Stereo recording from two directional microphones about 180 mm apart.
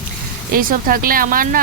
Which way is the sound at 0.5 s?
50° right (ahead or behind).